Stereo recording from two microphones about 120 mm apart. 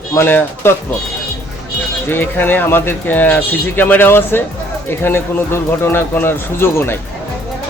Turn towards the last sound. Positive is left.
turn(degrees=20)  # may be behind; listen again after turning